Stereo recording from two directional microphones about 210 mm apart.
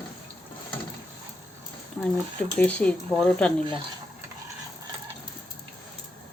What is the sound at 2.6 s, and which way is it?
Speech, 5° left (ahead or behind).